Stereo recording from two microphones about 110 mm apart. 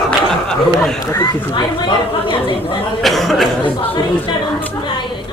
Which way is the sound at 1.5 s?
45° left (ahead or behind).